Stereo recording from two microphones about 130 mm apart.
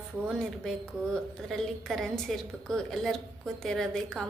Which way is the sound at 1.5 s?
Centre (ahead or behind).